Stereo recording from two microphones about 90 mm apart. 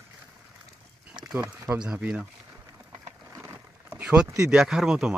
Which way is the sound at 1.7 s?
10° right (ahead or behind).